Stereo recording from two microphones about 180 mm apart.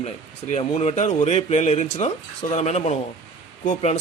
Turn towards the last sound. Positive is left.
turn(degrees=40)  # may be behind; listen again after turning